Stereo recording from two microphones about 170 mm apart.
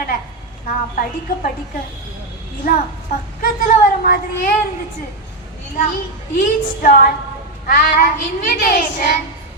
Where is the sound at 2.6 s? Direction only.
60° left (ahead or behind).